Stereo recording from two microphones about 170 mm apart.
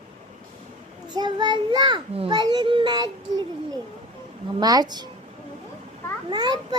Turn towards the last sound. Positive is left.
turn(degrees=-25)  # may be behind; listen again after turning